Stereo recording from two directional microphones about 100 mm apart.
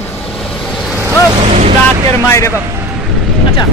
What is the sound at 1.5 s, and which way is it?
Speech, 90° right.